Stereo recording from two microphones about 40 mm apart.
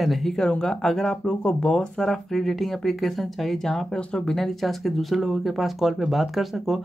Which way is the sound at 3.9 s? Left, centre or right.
Centre.